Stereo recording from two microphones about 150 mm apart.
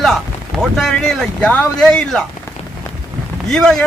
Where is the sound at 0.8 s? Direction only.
Centre (ahead or behind).